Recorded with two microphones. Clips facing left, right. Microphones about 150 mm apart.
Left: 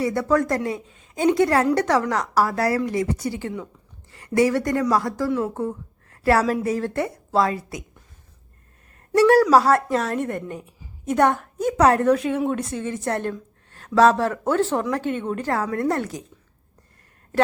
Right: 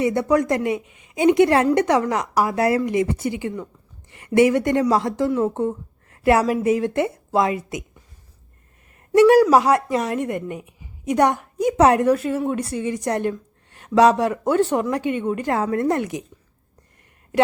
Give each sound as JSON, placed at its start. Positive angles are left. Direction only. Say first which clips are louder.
{"t": 0.0, "sound": "a woman's voice", "louder": "right 2 dB", "side_deg": -20}
{"t": 9.1, "sound": "a woman's voice", "louder": "right 2 dB", "side_deg": -15}
{"t": 12.1, "sound": "a woman's voice", "louder": "even", "side_deg": -5}